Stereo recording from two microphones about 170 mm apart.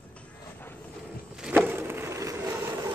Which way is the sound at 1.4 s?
10° right (ahead or behind).